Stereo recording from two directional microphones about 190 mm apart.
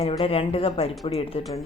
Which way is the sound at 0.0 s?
30° left (ahead or behind).